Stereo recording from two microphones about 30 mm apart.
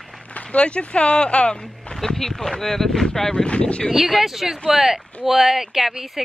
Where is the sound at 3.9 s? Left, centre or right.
Centre.